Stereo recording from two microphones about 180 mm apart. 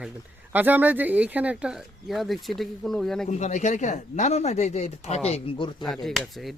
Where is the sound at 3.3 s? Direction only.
40° left (ahead or behind).